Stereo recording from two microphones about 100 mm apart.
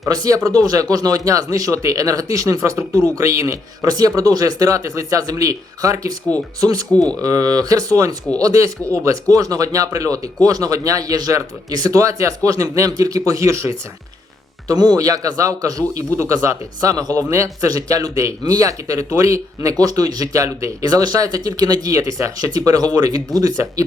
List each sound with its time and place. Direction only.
0.1 s speech: 35° right (ahead or behind)
14.7 s speech: 40° right (ahead or behind)